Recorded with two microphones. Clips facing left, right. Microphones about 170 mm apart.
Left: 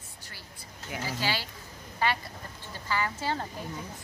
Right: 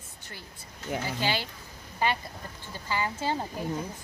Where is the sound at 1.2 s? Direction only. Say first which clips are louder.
Right 1 dB; 20° right (ahead or behind).